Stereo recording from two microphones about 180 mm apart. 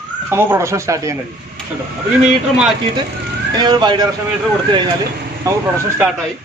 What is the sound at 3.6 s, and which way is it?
Speech, 25° right (ahead or behind).